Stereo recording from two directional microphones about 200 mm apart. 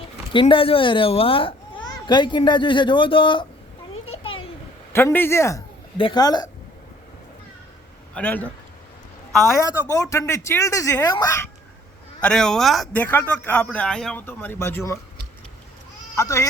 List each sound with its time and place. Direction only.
0.3 s speech: 25° left (ahead or behind)
4.2 s a sound: 25° left (ahead or behind)
4.9 s speech: 10° left (ahead or behind)
8.1 s speech: 10° left (ahead or behind)
9.6 s speech: 15° left (ahead or behind)
12.2 s speech: centre (ahead or behind)
16.1 s speech: 15° left (ahead or behind)